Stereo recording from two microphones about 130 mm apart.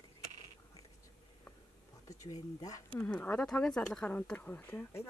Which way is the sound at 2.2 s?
25° left (ahead or behind).